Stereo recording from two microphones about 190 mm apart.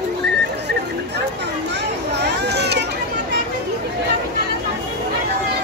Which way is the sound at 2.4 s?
60° right (ahead or behind).